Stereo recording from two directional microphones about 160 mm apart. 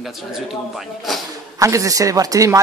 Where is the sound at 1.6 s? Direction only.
20° right (ahead or behind).